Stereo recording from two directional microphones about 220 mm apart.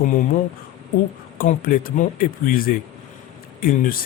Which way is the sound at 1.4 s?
40° left (ahead or behind).